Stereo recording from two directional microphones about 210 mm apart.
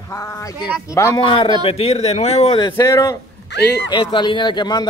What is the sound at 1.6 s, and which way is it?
A man's voice, 30° left (ahead or behind).